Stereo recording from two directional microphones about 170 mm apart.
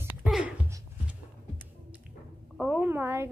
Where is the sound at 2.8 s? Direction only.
15° right (ahead or behind).